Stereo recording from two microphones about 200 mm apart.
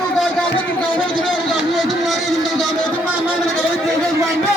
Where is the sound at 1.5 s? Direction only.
Centre (ahead or behind).